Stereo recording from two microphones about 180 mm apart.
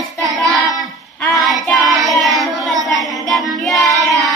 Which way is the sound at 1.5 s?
Centre (ahead or behind).